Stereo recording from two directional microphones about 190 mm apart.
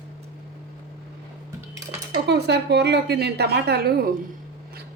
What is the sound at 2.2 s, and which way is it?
Speech, 60° right (ahead or behind).